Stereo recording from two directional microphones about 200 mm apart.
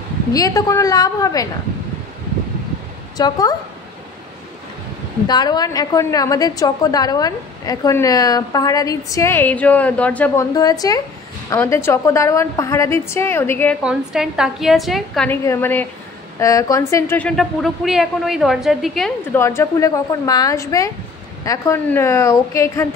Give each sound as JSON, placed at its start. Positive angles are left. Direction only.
{"t": 0.3, "sound": "a woman's voice", "side_deg": 15}
{"t": 3.2, "sound": "speech", "side_deg": 20}
{"t": 5.2, "sound": "a woman's voice", "side_deg": 20}
{"t": 10.5, "sound": "a woman's voice", "side_deg": 20}
{"t": 13.8, "sound": "a woman's voice", "side_deg": -5}
{"t": 15.4, "sound": "a woman's voice", "side_deg": 10}
{"t": 17.4, "sound": "a woman's voice", "side_deg": 0}
{"t": 19.3, "sound": "a woman's voice", "side_deg": 15}